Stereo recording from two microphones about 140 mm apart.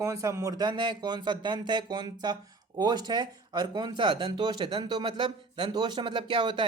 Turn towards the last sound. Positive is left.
turn(degrees=-35)  # may be behind; listen again after turning